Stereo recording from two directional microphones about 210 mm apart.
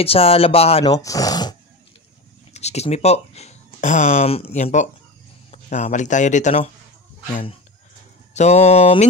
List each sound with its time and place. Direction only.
0.0 s speech: 25° left (ahead or behind)
0.9 s speech: 15° left (ahead or behind)
2.5 s speech: 30° left (ahead or behind)
8.4 s speech: 30° left (ahead or behind)